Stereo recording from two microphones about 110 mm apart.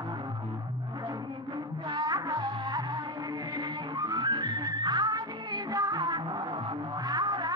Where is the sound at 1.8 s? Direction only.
40° right (ahead or behind).